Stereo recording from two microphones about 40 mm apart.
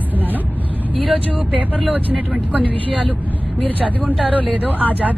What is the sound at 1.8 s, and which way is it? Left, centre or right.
Speech, right.